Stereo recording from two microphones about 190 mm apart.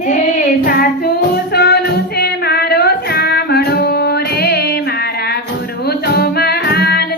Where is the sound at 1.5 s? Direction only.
60° left (ahead or behind).